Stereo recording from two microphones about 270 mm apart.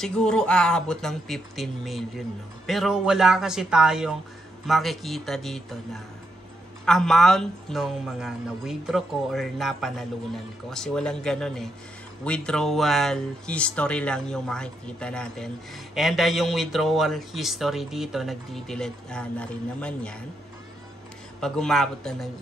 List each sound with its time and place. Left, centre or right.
0.0 s speech: centre
6.9 s speech: centre
21.4 s speech: centre